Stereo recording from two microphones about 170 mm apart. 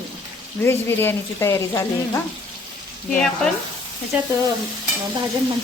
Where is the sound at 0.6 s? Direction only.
15° left (ahead or behind).